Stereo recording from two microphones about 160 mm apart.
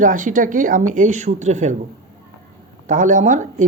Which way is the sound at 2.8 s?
55° right (ahead or behind).